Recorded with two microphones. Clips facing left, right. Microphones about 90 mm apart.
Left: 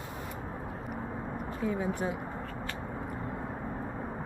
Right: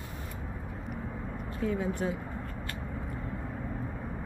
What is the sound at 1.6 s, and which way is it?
Speech, 10° left (ahead or behind).